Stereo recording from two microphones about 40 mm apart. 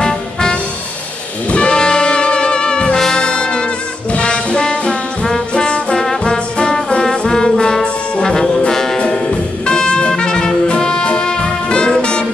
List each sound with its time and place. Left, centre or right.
0.0 s music: centre
3.0 s brass instrument: centre
4.1 s music: left
5.5 s trombone: left
8.9 s music: left